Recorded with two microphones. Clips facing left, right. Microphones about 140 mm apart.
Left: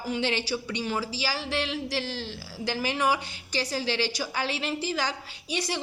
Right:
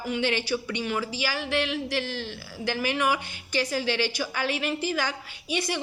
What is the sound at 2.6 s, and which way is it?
A woman's voice, 35° left (ahead or behind).